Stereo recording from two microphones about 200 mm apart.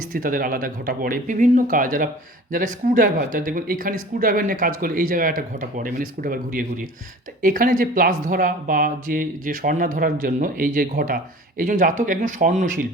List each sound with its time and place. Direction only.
0.1 s speech: 45° right (ahead or behind)